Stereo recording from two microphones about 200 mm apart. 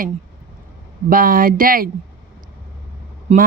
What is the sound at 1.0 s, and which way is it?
Speech, 45° right (ahead or behind).